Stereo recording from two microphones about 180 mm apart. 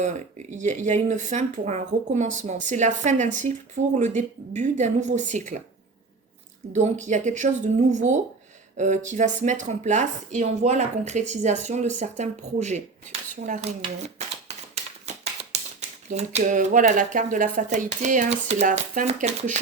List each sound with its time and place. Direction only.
0.0 s speech: 40° right (ahead or behind)
6.7 s speech: 40° right (ahead or behind)
13.8 s a sound: 35° right (ahead or behind)
16.0 s speech: 40° right (ahead or behind)